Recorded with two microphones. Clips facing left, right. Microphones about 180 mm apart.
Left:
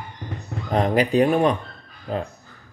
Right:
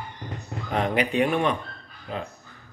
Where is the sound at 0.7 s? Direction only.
40° left (ahead or behind).